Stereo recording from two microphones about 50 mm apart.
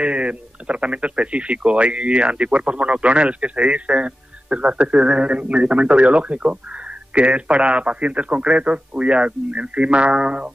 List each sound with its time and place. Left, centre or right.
0.0 s speech: right